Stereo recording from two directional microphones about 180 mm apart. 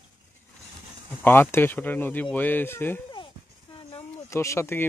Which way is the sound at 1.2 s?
10° left (ahead or behind).